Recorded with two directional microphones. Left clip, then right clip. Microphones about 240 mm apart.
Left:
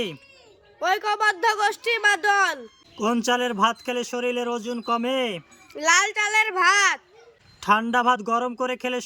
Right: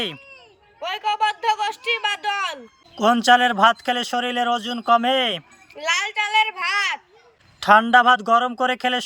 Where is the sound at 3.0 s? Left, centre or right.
Centre.